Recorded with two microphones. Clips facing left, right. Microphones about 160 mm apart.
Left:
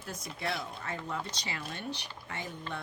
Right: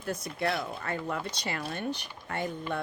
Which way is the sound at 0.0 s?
60° right (ahead or behind).